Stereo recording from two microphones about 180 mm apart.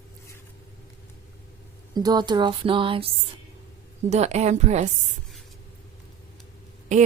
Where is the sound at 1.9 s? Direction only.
20° right (ahead or behind); by 4.9 s 40° right (ahead or behind).